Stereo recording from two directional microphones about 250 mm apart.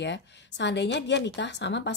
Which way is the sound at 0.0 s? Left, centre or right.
Left.